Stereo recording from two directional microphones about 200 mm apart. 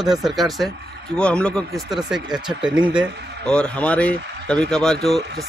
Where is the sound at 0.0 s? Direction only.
Centre (ahead or behind).